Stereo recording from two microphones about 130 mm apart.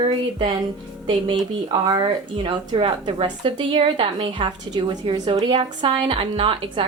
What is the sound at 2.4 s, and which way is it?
A woman's voice, 45° right (ahead or behind).